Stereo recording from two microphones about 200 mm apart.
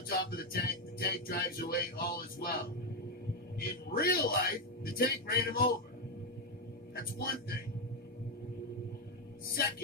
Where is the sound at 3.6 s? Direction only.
50° left (ahead or behind).